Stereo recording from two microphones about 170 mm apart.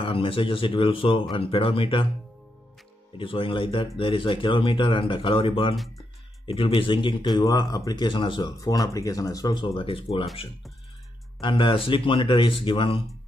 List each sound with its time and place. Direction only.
0.0 s speech: 30° left (ahead or behind)
3.2 s speech: 30° left (ahead or behind)
11.4 s speech: 30° left (ahead or behind)